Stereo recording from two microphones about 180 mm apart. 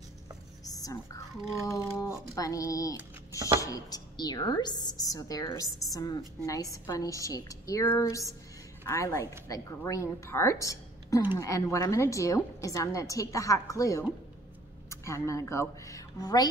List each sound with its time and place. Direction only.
0.7 s whispering: 20° left (ahead or behind)
1.7 s a woman's voice: 15° left (ahead or behind)
3.3 s speech: 15° right (ahead or behind)
3.6 s a woman's voice: 20° left (ahead or behind)